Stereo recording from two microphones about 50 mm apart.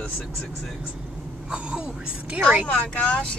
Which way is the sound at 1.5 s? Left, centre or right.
Right.